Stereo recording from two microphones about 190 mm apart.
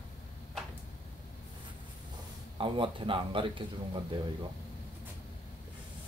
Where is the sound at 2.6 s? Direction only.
25° right (ahead or behind).